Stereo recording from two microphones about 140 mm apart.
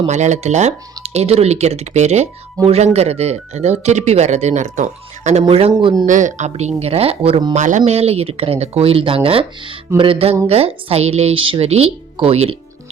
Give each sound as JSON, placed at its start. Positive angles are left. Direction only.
{"t": 0.1, "sound": "speech", "side_deg": -55}
{"t": 5.5, "sound": "a man's voice", "side_deg": -40}
{"t": 6.1, "sound": "speech", "side_deg": -65}
{"t": 6.5, "sound": "speech", "side_deg": -50}
{"t": 7.5, "sound": "a man's voice", "side_deg": -60}